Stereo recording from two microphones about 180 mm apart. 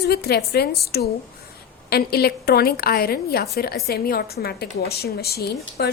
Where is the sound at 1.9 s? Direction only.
60° left (ahead or behind).